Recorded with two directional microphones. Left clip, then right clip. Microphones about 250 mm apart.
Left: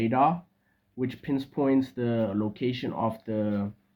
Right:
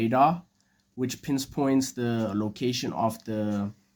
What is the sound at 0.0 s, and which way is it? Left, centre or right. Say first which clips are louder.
Speech: right 2 dB; right.